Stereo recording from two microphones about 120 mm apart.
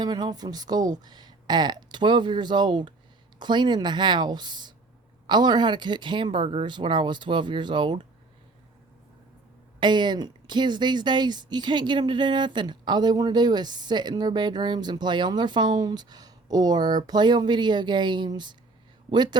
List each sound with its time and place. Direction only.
0.0 s speech: 35° right (ahead or behind)
9.8 s speech: 40° right (ahead or behind)